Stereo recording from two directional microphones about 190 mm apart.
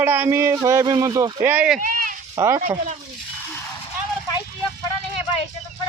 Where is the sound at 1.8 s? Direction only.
45° right (ahead or behind).